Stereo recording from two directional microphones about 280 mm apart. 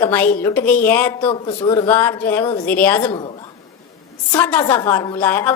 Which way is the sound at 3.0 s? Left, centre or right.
Centre.